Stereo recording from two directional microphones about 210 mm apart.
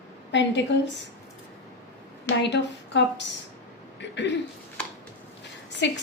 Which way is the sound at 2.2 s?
55° left (ahead or behind).